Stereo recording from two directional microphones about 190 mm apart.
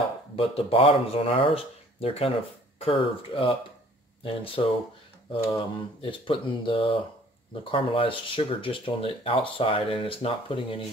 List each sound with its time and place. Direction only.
0.4 s speech: 30° left (ahead or behind)